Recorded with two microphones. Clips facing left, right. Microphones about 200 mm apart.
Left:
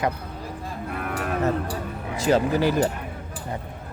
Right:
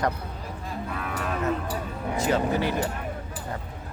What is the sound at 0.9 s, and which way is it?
Livestock, 55° left (ahead or behind).